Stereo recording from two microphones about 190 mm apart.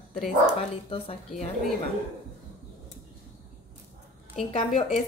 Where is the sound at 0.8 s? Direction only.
30° left (ahead or behind).